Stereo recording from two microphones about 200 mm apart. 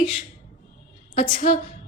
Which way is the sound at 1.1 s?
40° left (ahead or behind).